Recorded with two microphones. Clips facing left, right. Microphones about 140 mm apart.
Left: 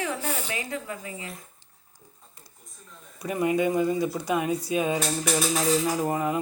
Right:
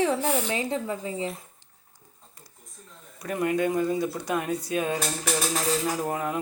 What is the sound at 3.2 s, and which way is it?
Cutlery, 5° left (ahead or behind).